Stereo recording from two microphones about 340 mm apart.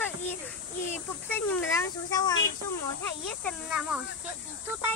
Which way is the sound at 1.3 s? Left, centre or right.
Centre.